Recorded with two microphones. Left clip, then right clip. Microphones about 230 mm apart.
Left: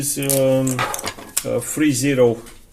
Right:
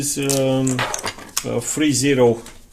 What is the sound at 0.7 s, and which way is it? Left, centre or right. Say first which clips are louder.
Speech: even; centre.